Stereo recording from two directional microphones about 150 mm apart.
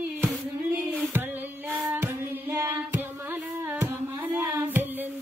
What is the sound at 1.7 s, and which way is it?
Music, 15° right (ahead or behind).